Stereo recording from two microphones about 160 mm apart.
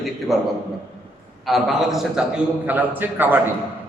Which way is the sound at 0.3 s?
Centre (ahead or behind).